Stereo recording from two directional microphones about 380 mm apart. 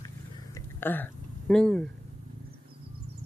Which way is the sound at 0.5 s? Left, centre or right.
Centre.